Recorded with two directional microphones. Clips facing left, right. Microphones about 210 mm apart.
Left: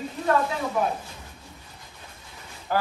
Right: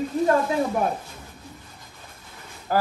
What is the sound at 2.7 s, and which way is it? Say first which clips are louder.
Speech: right 2 dB; 40° right (ahead or behind).